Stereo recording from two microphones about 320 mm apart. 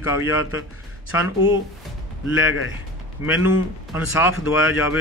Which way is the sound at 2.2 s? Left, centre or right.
Left.